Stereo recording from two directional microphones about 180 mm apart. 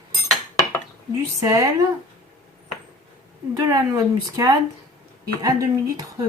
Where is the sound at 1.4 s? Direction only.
15° right (ahead or behind).